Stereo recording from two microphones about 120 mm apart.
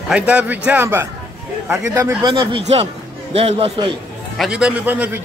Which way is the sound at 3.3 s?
55° right (ahead or behind).